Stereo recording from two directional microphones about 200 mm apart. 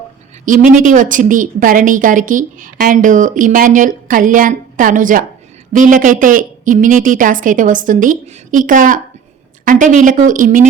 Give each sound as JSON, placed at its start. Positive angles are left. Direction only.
{"t": 0.4, "sound": "a woman's voice", "side_deg": -40}